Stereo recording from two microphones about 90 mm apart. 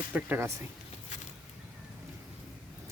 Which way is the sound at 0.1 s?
15° right (ahead or behind).